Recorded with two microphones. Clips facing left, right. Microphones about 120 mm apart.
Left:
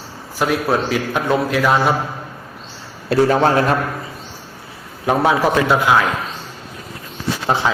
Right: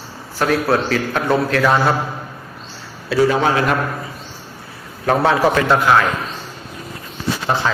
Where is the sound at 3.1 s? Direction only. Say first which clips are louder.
Left 1 dB; 45° left (ahead or behind).